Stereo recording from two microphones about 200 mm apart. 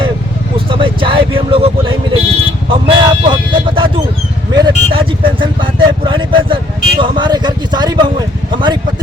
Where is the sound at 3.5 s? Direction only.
25° right (ahead or behind).